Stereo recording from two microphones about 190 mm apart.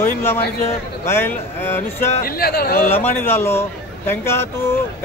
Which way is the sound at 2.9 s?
10° left (ahead or behind).